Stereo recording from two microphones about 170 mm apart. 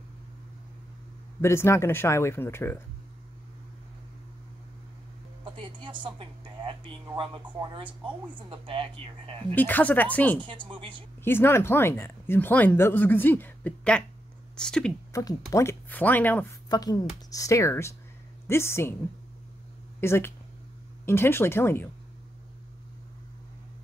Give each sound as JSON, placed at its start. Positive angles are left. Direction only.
{"t": 1.4, "sound": "speech", "side_deg": 15}
{"t": 5.4, "sound": "a sound", "side_deg": -30}
{"t": 7.2, "sound": "speech", "side_deg": -30}
{"t": 9.6, "sound": "speech", "side_deg": 10}
{"t": 10.7, "sound": "speech", "side_deg": -30}
{"t": 11.2, "sound": "speech", "side_deg": 15}
{"t": 16.6, "sound": "a woman's voice", "side_deg": 20}
{"t": 20.0, "sound": "speech", "side_deg": 15}